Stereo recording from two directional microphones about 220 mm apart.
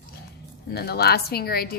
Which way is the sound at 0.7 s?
45° left (ahead or behind).